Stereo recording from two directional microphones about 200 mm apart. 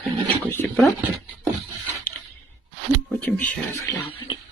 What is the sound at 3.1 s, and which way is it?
Speech, 10° left (ahead or behind).